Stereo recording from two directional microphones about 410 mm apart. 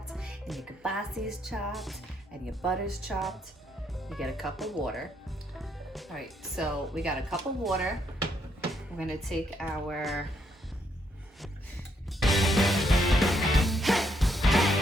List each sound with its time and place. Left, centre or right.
0.1 s speech: centre
12.2 s music: centre